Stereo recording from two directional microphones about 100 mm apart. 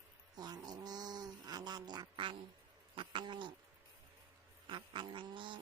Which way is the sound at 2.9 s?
50° right (ahead or behind).